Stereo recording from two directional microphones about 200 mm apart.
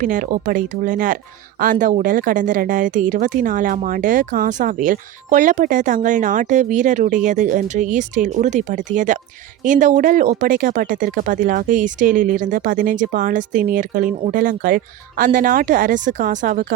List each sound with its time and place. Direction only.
0.0 s speech: 40° right (ahead or behind)